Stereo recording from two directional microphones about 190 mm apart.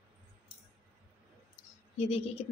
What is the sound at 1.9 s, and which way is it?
Speech, 30° left (ahead or behind).